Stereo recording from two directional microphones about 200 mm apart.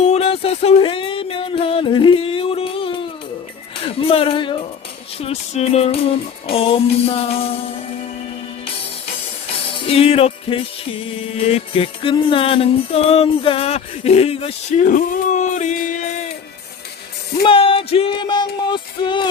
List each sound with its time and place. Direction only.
0.0 s music: 30° left (ahead or behind)
3.8 s a sound: 25° left (ahead or behind)
5.2 s music: 30° left (ahead or behind)
9.8 s music: 30° left (ahead or behind)
17.4 s music: 25° left (ahead or behind)